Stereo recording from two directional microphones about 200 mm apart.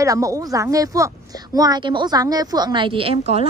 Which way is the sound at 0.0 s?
15° right (ahead or behind).